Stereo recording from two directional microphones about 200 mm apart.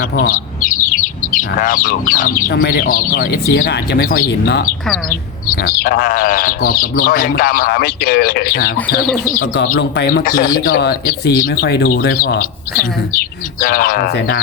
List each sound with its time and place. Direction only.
0.2 s speech: 40° left (ahead or behind)
10.1 s speech: 45° left (ahead or behind)